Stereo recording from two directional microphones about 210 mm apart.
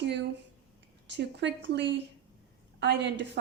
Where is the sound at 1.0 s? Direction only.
55° right (ahead or behind).